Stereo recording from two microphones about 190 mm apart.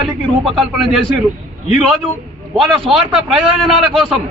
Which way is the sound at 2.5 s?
Centre (ahead or behind).